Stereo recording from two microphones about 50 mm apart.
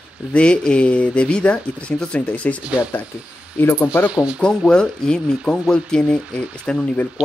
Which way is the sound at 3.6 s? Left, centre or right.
Left.